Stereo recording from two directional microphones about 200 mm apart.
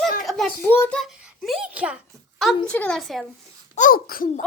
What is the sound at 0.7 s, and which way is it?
Speech, 10° left (ahead or behind).